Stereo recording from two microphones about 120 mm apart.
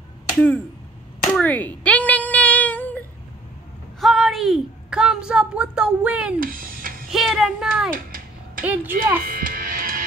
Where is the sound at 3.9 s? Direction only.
Centre (ahead or behind).